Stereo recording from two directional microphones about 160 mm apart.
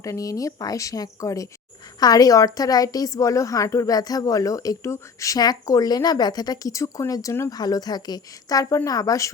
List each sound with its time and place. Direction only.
0.0 s a woman's voice: 20° left (ahead or behind)